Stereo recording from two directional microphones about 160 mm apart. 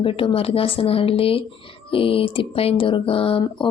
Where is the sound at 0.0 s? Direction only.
35° left (ahead or behind).